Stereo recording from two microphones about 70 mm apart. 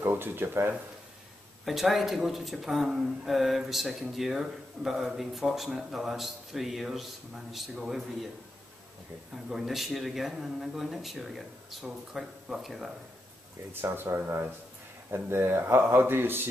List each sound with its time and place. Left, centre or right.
0.0 s a man's voice: right
1.7 s speech: centre
9.3 s speech: centre
13.7 s a man's voice: right